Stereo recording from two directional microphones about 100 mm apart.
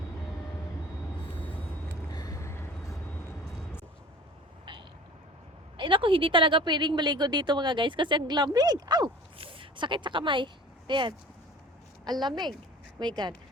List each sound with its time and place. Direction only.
2.0 s vehicle: 40° left (ahead or behind)
5.7 s a woman's voice: 55° right (ahead or behind)
9.4 s a woman's voice: 60° right (ahead or behind)